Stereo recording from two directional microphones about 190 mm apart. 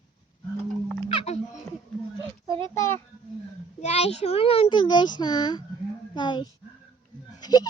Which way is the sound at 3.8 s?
35° left (ahead or behind).